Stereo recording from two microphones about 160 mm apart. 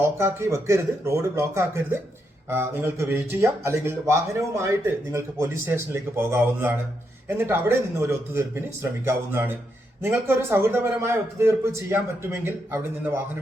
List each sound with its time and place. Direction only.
0.0 s speech: 15° right (ahead or behind)